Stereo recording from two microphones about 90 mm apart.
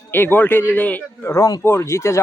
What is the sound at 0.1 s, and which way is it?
Speech, 25° left (ahead or behind).